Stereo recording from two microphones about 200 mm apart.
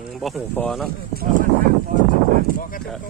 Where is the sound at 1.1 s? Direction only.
50° right (ahead or behind).